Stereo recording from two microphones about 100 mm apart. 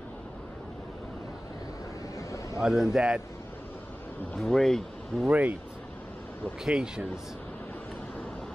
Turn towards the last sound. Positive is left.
turn(degrees=-5)  # may be behind; listen again after turning